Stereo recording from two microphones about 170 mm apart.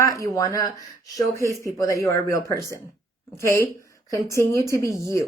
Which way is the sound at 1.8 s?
20° left (ahead or behind).